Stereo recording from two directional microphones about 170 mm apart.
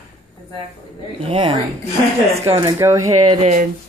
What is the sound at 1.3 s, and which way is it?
Speech, 30° right (ahead or behind).